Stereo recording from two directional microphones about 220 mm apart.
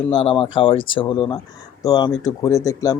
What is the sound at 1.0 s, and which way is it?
Speech, 20° left (ahead or behind).